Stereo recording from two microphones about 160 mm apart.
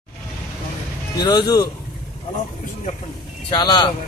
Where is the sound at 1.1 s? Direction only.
25° left (ahead or behind).